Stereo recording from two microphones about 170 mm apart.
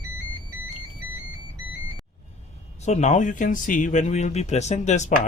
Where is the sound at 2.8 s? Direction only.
45° left (ahead or behind).